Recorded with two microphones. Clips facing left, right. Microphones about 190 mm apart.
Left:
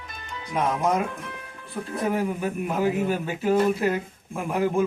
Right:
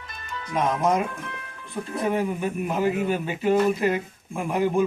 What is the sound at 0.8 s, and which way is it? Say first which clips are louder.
Speech: right 2 dB; 10° right (ahead or behind).